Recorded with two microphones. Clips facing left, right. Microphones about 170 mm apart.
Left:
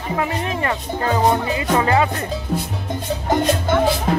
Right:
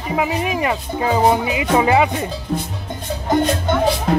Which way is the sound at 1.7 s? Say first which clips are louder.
Right 3 dB; 15° right (ahead or behind).